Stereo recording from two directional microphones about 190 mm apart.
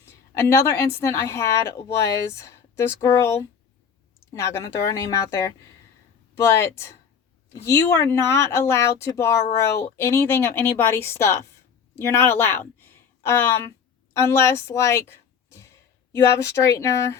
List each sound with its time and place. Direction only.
0.3 s speech: 15° left (ahead or behind)